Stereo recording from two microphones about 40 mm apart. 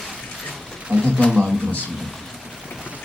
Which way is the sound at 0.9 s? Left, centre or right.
Right.